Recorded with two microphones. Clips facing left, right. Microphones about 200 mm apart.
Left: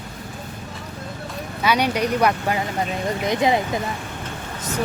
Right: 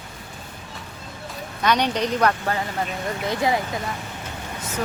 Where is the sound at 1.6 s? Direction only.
10° left (ahead or behind).